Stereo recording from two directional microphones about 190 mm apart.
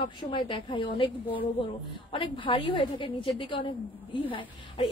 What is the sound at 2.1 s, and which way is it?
A woman's voice, 25° left (ahead or behind).